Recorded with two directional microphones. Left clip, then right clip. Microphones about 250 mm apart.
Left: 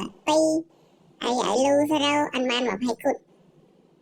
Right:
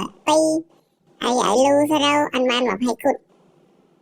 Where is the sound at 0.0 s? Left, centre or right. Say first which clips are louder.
Right 4 dB; centre.